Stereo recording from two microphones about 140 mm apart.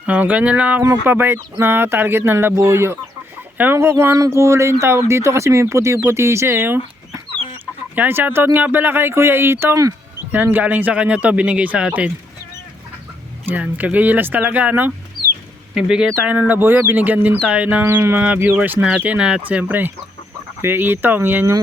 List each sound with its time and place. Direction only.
0.0 s speech: 10° right (ahead or behind)
13.5 s speech: 10° right (ahead or behind)